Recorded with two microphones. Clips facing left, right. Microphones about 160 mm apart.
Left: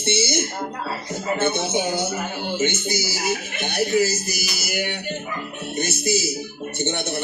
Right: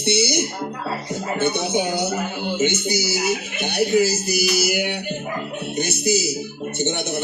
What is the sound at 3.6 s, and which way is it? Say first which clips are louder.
Speech: right 2 dB; 15° right (ahead or behind).